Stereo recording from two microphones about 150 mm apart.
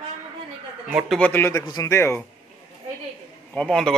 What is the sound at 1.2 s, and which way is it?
Speech, 15° left (ahead or behind).